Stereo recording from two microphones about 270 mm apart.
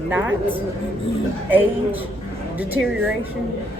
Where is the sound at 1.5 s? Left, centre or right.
Centre.